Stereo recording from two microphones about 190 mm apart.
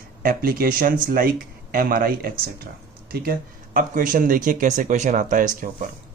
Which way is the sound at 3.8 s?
45° right (ahead or behind).